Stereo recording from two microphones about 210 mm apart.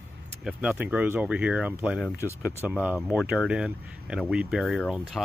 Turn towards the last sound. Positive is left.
turn(degrees=0)  # may be behind; listen again after turning